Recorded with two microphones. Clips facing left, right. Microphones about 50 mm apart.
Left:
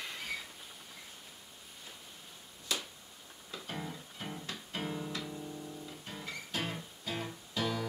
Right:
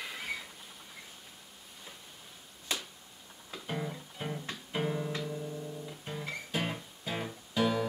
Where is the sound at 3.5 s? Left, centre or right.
Centre.